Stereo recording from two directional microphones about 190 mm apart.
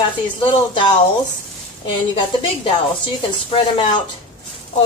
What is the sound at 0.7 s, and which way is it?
Speech, 25° left (ahead or behind).